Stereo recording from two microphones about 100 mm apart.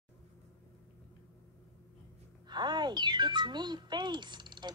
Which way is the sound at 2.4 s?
45° right (ahead or behind).